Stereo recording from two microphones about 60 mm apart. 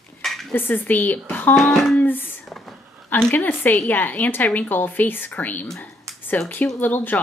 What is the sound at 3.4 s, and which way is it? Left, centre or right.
A woman's voice, left.